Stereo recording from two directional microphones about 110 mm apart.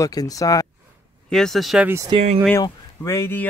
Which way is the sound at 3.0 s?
25° left (ahead or behind).